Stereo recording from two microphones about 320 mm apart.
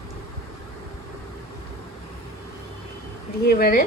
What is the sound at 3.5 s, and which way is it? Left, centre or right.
Speech, left.